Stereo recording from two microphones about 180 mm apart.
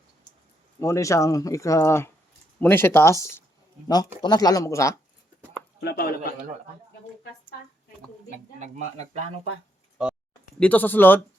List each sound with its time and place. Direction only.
0.8 s speech: 15° left (ahead or behind)
5.8 s speech: 60° left (ahead or behind)
8.5 s speech: 40° right (ahead or behind)
10.0 s a sound: 5° right (ahead or behind)
10.6 s speech: 10° left (ahead or behind)